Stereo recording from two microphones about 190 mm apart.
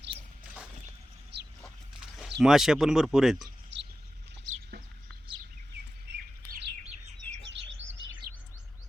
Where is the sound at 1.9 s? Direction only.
5° right (ahead or behind).